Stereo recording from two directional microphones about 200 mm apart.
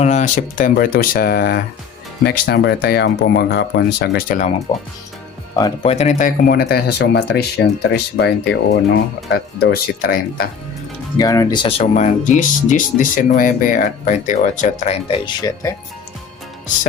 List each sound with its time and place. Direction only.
0.0 s speech: 35° left (ahead or behind)
5.8 s speech: 30° left (ahead or behind); by 10.5 s 45° left (ahead or behind)
11.2 s speech: 15° left (ahead or behind)
11.9 s speech: 35° left (ahead or behind); by 15.7 s 20° left (ahead or behind)